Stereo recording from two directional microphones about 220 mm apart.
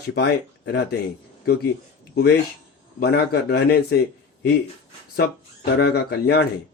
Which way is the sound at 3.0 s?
45° left (ahead or behind).